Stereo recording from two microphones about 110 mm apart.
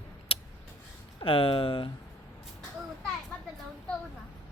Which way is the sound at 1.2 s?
55° left (ahead or behind).